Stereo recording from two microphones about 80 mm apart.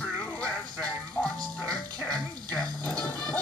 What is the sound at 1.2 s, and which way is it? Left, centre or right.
Music, left.